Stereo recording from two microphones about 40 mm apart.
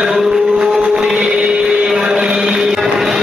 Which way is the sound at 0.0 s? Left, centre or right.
Centre.